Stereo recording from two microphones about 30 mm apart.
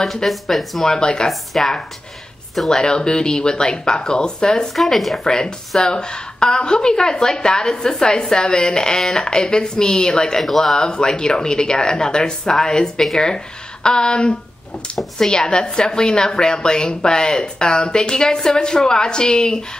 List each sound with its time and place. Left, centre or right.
0.0 s speech: centre
0.8 s a woman's voice: left
1.5 s speech: centre
2.7 s a woman's voice: left
4.8 s speech: centre
5.2 s a woman's voice: left
15.1 s a woman's voice: centre